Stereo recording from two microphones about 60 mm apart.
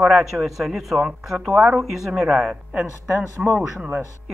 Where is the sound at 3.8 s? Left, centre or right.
Right.